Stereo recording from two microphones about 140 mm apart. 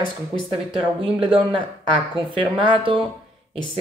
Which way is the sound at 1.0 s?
40° right (ahead or behind).